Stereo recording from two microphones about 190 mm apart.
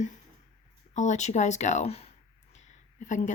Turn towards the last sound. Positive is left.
turn(degrees=40)  # may be behind; listen again after turning